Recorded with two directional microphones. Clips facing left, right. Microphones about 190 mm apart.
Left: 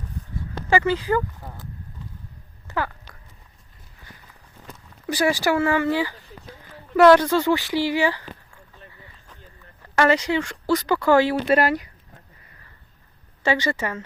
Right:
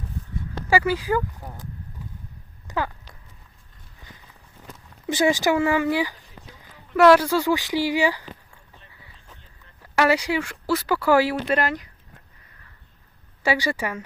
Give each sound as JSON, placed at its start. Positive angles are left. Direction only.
{"t": 0.7, "sound": "speech", "side_deg": -10}
{"t": 2.6, "sound": "a sound", "side_deg": -15}
{"t": 5.0, "sound": "speech", "side_deg": -20}
{"t": 6.9, "sound": "speech", "side_deg": -5}
{"t": 9.9, "sound": "speech", "side_deg": -10}
{"t": 11.4, "sound": "speech", "side_deg": 10}
{"t": 13.4, "sound": "speech", "side_deg": -10}